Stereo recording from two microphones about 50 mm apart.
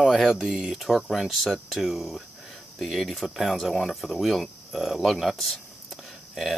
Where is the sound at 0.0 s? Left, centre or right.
Centre.